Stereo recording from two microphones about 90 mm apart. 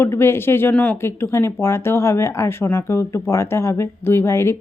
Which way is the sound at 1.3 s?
30° left (ahead or behind).